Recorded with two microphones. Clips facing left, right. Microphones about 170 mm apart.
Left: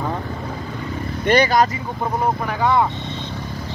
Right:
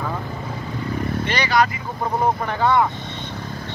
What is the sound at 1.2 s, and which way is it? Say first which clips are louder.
Speech: left 6 dB; 50° left (ahead or behind).